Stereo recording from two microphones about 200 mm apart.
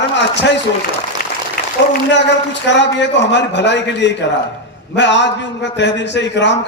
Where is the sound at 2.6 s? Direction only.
60° left (ahead or behind).